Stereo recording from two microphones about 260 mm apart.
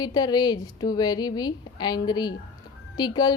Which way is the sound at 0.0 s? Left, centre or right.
Centre.